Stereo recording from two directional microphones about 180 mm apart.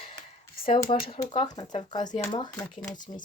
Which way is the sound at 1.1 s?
25° left (ahead or behind).